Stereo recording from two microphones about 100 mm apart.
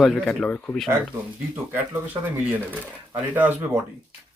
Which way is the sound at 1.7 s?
20° right (ahead or behind).